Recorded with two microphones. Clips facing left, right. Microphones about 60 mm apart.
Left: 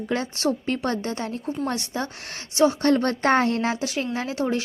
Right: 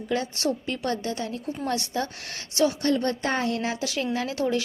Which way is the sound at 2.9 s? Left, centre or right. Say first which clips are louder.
Left 5 dB; left.